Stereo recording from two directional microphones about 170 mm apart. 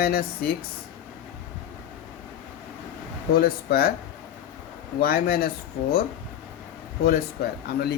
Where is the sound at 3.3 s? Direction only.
60° left (ahead or behind).